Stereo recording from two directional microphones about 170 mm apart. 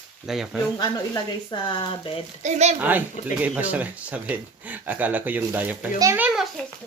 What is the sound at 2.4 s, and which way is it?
Speech, 40° right (ahead or behind).